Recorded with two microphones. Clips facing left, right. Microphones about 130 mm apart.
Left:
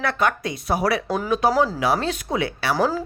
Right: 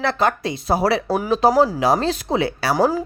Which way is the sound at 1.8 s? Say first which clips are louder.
Right 4 dB; 35° right (ahead or behind).